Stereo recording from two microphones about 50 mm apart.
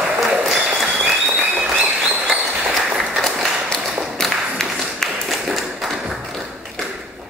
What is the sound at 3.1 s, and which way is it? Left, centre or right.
Run, centre.